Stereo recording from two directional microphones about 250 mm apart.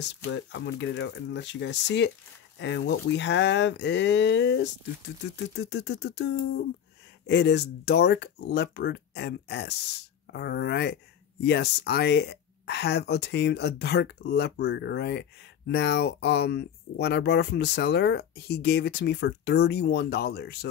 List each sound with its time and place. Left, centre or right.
0.0 s speech: left